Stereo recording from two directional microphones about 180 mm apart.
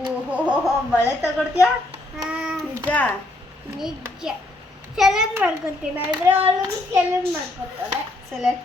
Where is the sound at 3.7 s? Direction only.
5° right (ahead or behind).